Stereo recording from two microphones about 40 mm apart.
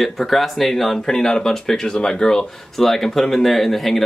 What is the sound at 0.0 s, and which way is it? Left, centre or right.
Speech, centre.